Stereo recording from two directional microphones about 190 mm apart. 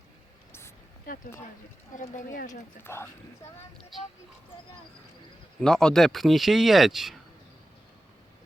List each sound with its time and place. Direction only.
1.1 s speech: 45° left (ahead or behind)
2.8 s speech: 15° left (ahead or behind)
5.5 s speech: 5° left (ahead or behind)